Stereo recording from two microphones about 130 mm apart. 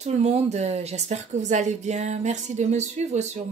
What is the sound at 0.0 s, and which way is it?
A woman's voice, 60° right (ahead or behind).